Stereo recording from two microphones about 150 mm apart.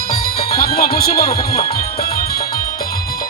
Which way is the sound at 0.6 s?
85° left.